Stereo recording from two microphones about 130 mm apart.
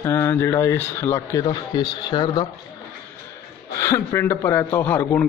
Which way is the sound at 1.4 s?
35° left (ahead or behind).